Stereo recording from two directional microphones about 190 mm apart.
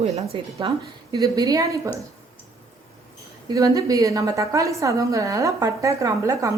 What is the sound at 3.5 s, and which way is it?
A woman's voice, 20° right (ahead or behind).